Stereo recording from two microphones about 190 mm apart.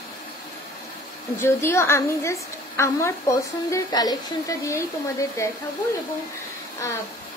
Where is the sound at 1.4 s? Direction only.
15° left (ahead or behind).